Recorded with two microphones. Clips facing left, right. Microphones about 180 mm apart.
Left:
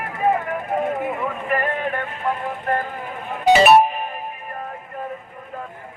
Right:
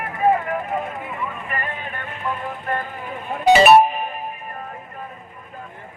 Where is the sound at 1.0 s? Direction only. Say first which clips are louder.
Left 5 dB; 50° left (ahead or behind).